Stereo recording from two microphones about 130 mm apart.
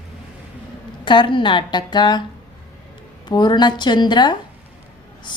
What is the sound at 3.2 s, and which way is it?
Speech, 35° left (ahead or behind).